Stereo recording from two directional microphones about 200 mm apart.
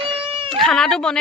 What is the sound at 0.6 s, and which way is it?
Speech, 5° left (ahead or behind).